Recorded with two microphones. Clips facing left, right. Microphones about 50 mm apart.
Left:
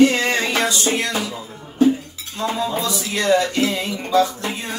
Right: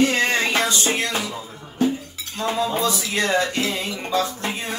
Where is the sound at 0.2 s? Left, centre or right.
Right.